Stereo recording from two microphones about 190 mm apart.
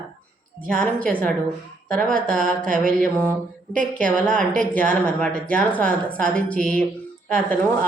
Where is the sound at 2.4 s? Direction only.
45° right (ahead or behind).